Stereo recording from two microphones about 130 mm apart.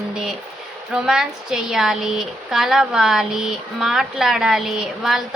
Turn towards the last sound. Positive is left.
turn(degrees=-5)  # may be behind; listen again after turning